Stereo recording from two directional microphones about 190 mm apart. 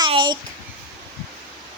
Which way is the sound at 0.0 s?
25° right (ahead or behind).